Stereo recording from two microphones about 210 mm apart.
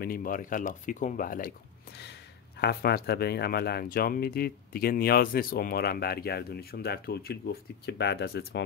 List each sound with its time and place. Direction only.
0.0 s speech: 45° left (ahead or behind)
2.6 s speech: 50° left (ahead or behind)